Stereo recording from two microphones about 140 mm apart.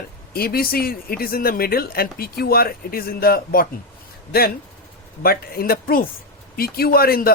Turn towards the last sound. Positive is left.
turn(degrees=90)